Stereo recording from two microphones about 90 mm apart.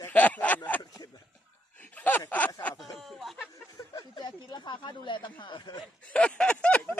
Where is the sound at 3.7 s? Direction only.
50° left (ahead or behind).